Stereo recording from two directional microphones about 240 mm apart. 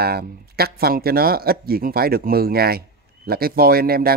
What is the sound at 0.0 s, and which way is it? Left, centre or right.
Speech, right.